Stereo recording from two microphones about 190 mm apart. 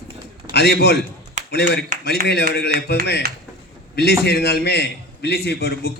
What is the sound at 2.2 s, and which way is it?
A man's voice, 60° left (ahead or behind).